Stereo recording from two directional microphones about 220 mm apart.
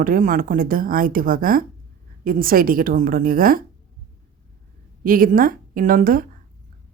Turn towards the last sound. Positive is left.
turn(degrees=-40)  # may be behind; listen again after turning